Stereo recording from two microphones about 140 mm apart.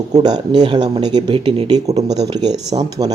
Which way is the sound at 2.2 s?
30° right (ahead or behind).